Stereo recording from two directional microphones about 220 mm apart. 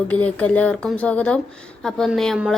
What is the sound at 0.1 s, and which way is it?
A woman's voice, 5° left (ahead or behind).